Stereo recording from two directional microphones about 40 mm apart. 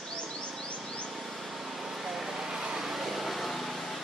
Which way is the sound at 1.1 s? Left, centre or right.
Centre.